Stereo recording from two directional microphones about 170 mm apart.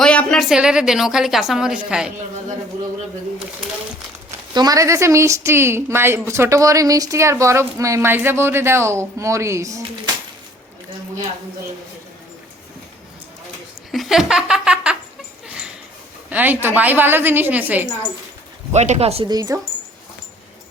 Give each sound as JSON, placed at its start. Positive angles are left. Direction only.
{"t": 0.0, "sound": "a woman's voice", "side_deg": 5}
{"t": 4.3, "sound": "speech", "side_deg": -20}
{"t": 13.9, "sound": "laughter", "side_deg": 0}
{"t": 16.3, "sound": "speech", "side_deg": -10}
{"t": 18.7, "sound": "speech", "side_deg": -40}
{"t": 19.3, "sound": "speech", "side_deg": -20}